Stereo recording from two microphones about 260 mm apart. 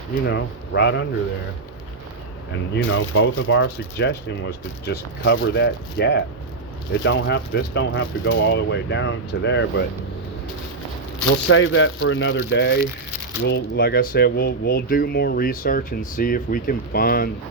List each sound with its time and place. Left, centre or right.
0.3 s speech: left
2.5 s speech: left
11.4 s speech: left